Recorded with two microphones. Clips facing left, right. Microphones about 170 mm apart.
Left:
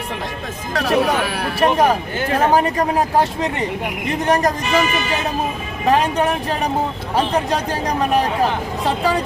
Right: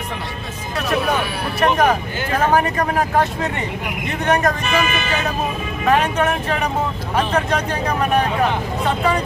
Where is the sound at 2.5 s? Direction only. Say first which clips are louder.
Left 1 dB; 30° left (ahead or behind).